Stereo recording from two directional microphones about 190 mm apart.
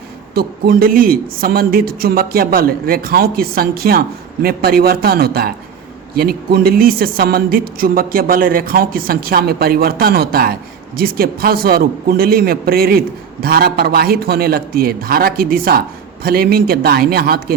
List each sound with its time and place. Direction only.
0.3 s speech: 55° right (ahead or behind)